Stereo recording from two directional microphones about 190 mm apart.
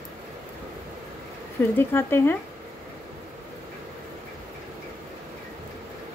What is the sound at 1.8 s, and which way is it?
Speech, 10° left (ahead or behind).